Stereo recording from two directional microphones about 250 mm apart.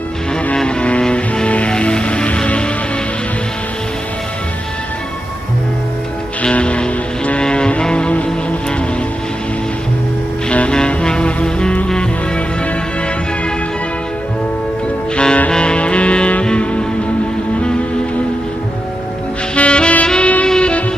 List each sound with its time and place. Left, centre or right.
0.4 s music: centre
6.4 s music: centre
10.5 s music: centre
15.1 s music: centre
19.5 s saxophone: centre